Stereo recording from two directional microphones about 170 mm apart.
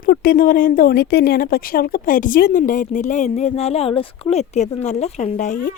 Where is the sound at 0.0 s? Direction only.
60° left (ahead or behind).